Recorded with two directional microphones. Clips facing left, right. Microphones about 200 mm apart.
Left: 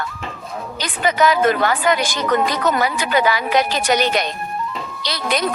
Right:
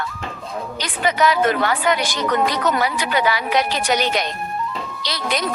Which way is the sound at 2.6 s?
45° left (ahead or behind).